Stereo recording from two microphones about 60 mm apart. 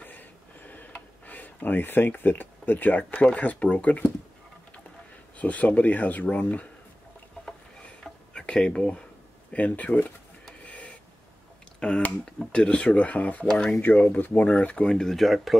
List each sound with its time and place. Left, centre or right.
0.0 s a sound: left
5.4 s speech: left
8.3 s speech: centre
10.6 s a sound: left
11.8 s speech: centre
13.5 s speech: centre
14.3 s speech: left
15.0 s speech: centre